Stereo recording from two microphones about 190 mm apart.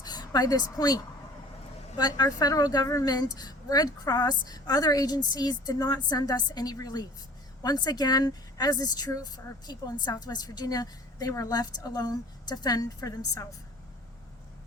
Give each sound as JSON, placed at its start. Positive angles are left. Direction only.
{"t": 0.0, "sound": "speech", "side_deg": 20}